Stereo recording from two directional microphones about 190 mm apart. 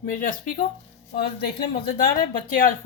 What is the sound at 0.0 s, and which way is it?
Speech, 45° left (ahead or behind).